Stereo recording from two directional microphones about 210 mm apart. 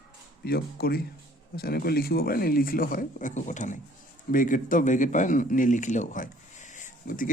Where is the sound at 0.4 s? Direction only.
45° left (ahead or behind).